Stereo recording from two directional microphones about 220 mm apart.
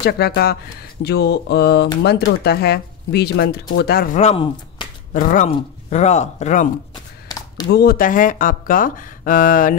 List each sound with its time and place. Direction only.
0.0 s speech: 45° left (ahead or behind); by 4.8 s 25° left (ahead or behind)
5.1 s speech: 35° left (ahead or behind)
7.7 s speech: 45° left (ahead or behind)